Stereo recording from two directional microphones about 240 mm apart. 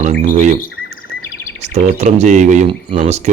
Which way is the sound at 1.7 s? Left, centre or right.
Right.